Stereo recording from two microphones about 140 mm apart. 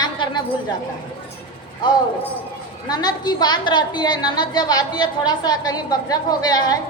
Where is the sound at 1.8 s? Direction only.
30° left (ahead or behind).